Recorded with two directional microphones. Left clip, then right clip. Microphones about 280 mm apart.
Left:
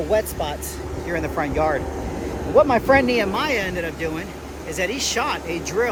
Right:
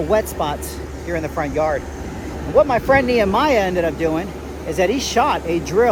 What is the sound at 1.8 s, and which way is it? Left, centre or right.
Vehicle, left.